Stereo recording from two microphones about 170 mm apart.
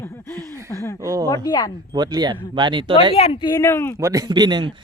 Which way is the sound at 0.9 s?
20° right (ahead or behind).